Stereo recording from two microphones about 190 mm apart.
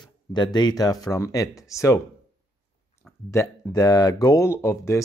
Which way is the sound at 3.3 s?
20° left (ahead or behind).